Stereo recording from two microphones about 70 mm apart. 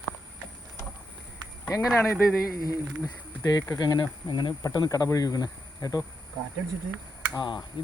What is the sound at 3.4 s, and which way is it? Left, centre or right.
Speech, left.